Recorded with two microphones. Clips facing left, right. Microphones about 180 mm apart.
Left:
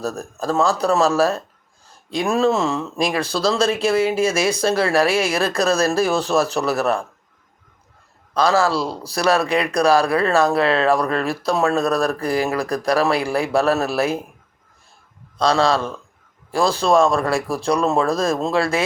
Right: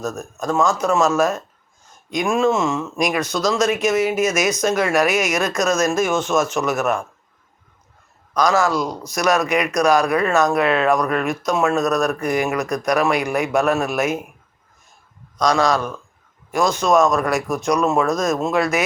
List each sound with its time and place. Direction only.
0.0 s speech: 35° left (ahead or behind)
8.3 s speech: 30° left (ahead or behind)
15.4 s speech: 30° left (ahead or behind)